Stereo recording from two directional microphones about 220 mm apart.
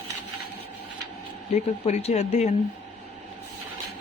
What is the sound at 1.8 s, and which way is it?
Speech, 30° left (ahead or behind).